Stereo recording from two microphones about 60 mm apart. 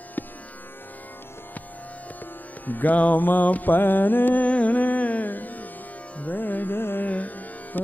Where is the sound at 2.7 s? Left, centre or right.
Left.